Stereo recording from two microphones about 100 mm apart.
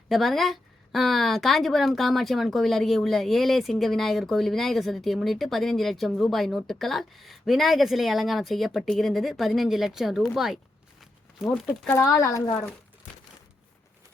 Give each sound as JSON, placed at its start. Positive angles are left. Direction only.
{"t": 0.1, "sound": "a woman's voice", "side_deg": 0}
{"t": 11.0, "sound": "a sound", "side_deg": 0}
{"t": 11.9, "sound": "speech", "side_deg": 30}